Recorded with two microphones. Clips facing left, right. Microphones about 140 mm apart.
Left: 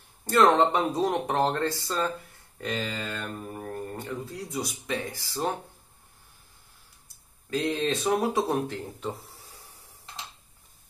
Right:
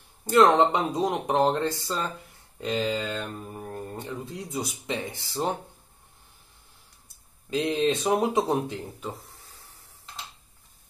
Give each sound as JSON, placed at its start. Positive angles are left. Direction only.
{"t": 0.3, "sound": "speech", "side_deg": -20}
{"t": 7.4, "sound": "speech", "side_deg": -20}
{"t": 9.5, "sound": "a sound", "side_deg": 15}